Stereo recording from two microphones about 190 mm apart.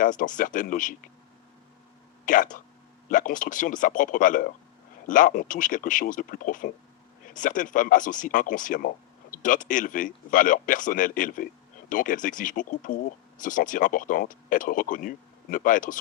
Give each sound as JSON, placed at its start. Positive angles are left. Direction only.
{"t": 0.0, "sound": "speech", "side_deg": 45}
{"t": 2.2, "sound": "speech", "side_deg": 45}